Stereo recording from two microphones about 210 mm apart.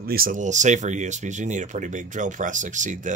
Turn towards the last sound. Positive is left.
turn(degrees=-35)  # may be behind; listen again after turning